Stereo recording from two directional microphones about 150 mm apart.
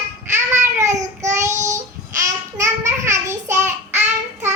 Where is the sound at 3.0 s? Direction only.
20° right (ahead or behind).